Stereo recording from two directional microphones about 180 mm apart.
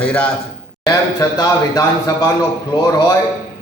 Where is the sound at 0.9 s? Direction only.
20° left (ahead or behind).